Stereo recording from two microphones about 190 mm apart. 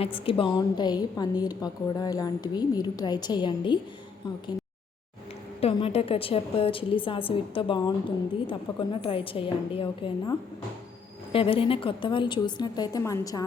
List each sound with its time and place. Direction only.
0.0 s a woman's voice: 30° left (ahead or behind)
5.5 s a woman's voice: 30° left (ahead or behind)